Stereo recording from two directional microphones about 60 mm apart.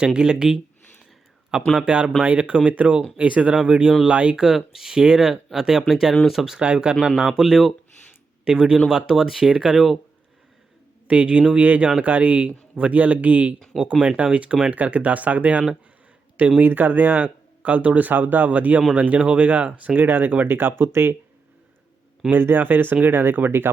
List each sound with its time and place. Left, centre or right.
0.0 s speech: centre
1.8 s speech: centre
6.6 s speech: centre
11.1 s speech: right
22.3 s speech: right